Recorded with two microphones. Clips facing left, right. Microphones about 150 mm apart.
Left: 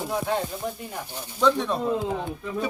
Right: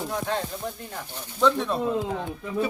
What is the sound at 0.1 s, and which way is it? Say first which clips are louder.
Speech: left 5 dB; 10° left (ahead or behind).